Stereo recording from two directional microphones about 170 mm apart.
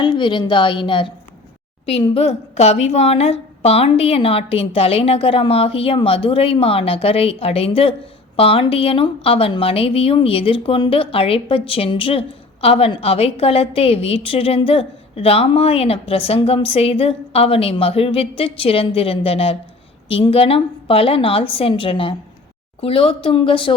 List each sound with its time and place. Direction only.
0.0 s a woman's voice: 25° left (ahead or behind)